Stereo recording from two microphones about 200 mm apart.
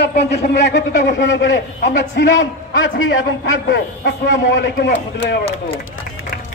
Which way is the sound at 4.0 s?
65° left (ahead or behind).